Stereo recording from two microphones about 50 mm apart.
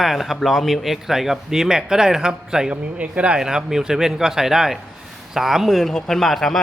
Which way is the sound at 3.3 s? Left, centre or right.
Centre.